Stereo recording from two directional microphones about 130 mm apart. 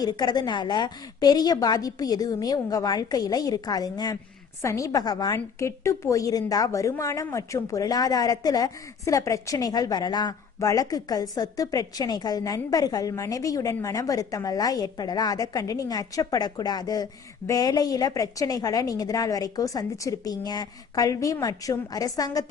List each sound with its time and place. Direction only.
0.0 s a woman's voice: 30° left (ahead or behind)